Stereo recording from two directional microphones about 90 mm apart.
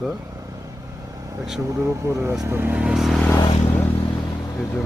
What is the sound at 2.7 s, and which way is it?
Speech, 5° right (ahead or behind).